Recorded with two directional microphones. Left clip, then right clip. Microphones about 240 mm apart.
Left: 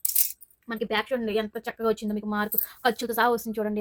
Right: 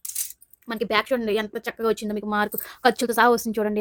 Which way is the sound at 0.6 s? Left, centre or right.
Right.